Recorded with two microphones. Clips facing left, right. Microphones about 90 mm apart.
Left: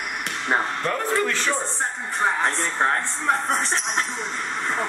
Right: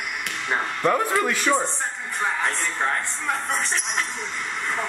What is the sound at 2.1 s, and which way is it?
Speech, 30° left (ahead or behind).